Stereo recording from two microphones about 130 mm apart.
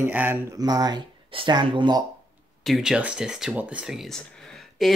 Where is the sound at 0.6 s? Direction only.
30° right (ahead or behind).